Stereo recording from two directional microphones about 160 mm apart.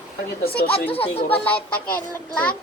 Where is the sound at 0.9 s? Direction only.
35° left (ahead or behind).